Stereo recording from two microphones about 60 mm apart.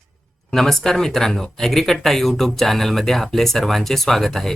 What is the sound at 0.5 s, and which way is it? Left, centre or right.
Speech, centre.